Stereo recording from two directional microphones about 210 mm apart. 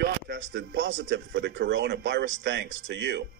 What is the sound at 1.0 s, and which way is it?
Speech, 55° right (ahead or behind).